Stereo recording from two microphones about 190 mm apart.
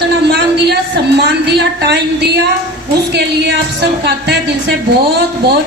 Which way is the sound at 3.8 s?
60° right (ahead or behind).